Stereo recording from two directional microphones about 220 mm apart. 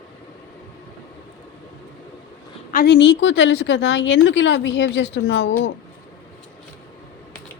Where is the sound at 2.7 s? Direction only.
45° left (ahead or behind).